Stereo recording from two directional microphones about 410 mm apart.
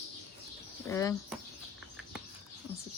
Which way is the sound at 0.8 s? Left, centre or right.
Centre.